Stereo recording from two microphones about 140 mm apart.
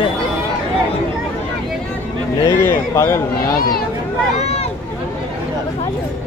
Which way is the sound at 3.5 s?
90° left.